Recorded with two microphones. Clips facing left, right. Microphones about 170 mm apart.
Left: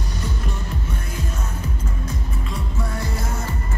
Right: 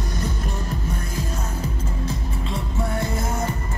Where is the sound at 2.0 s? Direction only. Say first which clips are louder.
Right 2 dB; 30° right (ahead or behind).